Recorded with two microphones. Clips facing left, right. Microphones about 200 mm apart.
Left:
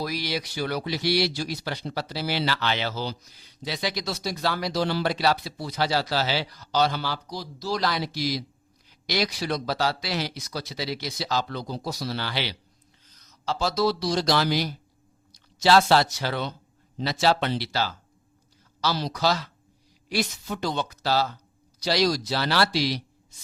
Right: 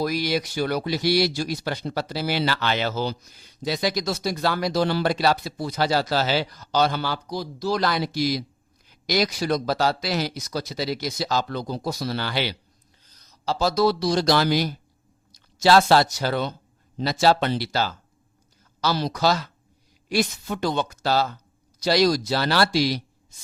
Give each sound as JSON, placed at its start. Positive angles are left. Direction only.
{"t": 0.0, "sound": "speech", "side_deg": -50}
{"t": 13.1, "sound": "speech", "side_deg": -35}